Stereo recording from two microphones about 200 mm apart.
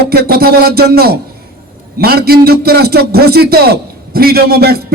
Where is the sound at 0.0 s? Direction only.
50° right (ahead or behind).